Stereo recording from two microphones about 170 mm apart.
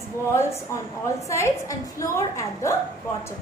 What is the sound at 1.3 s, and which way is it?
A woman's voice, 15° left (ahead or behind).